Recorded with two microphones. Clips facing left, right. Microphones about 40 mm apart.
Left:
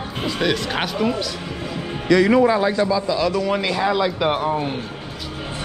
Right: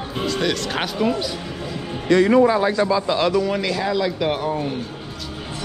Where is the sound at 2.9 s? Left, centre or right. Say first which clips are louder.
Right 1 dB; right.